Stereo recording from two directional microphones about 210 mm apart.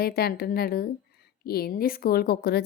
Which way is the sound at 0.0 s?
45° left (ahead or behind).